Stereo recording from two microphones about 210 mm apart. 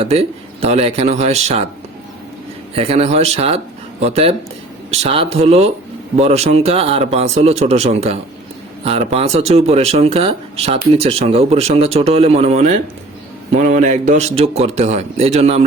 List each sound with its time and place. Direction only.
0.0 s speech: 30° right (ahead or behind)
2.7 s speech: 30° right (ahead or behind)